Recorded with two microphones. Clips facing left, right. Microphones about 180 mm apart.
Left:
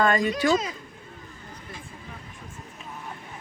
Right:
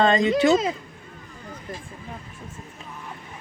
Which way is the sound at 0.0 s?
25° right (ahead or behind).